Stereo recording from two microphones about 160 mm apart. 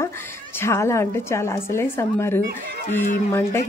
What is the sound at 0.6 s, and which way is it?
Speech, 15° left (ahead or behind).